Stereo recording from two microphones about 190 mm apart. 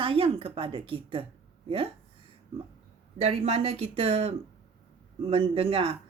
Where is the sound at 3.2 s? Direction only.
35° right (ahead or behind).